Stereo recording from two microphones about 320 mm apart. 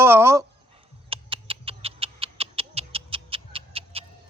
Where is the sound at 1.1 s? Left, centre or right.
Centre.